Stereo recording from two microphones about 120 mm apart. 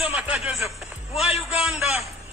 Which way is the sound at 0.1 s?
5° right (ahead or behind).